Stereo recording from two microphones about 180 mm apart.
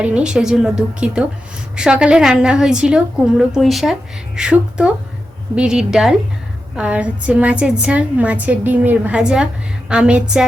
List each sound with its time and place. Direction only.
0.0 s a woman's voice: 5° right (ahead or behind)